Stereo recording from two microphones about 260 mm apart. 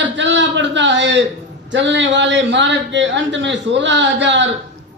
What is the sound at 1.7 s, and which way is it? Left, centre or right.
A man's voice, right.